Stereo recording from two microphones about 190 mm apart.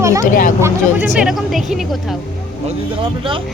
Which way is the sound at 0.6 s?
5° right (ahead or behind).